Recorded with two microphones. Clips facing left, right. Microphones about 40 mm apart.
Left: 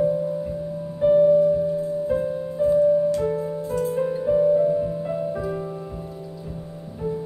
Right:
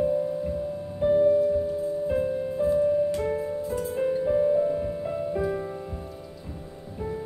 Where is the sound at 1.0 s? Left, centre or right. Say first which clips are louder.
Left 5 dB; centre.